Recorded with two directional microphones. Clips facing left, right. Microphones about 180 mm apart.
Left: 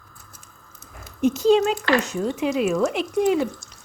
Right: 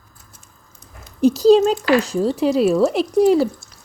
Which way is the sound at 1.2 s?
35° right (ahead or behind).